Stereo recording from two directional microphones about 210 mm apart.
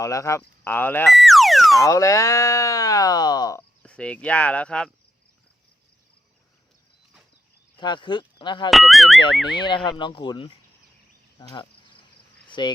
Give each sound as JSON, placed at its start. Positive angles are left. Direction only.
{"t": 0.0, "sound": "speech", "side_deg": 15}
{"t": 1.8, "sound": "speech", "side_deg": 15}
{"t": 3.8, "sound": "speech", "side_deg": 5}
{"t": 7.8, "sound": "speech", "side_deg": 20}
{"t": 8.7, "sound": "speech", "side_deg": 0}
{"t": 9.6, "sound": "speech", "side_deg": 20}
{"t": 11.3, "sound": "cricket", "side_deg": 20}
{"t": 12.5, "sound": "speech", "side_deg": 20}